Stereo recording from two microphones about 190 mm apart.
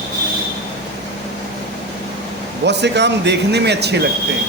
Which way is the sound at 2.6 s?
65° right (ahead or behind).